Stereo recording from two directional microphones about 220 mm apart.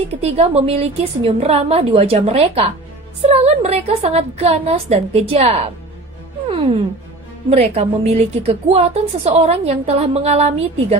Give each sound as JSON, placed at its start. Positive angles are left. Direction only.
{"t": 0.1, "sound": "a woman's voice", "side_deg": -30}
{"t": 6.4, "sound": "music", "side_deg": -25}
{"t": 7.4, "sound": "a woman's voice", "side_deg": -30}